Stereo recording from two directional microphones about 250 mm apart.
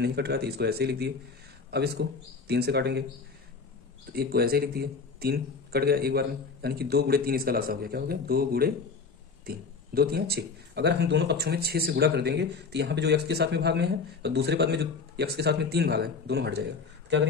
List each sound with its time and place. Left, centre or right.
0.0 s speech: right
4.1 s speech: right